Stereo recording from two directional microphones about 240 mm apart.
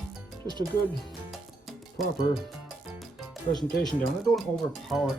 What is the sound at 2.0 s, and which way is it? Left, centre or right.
Speech, centre.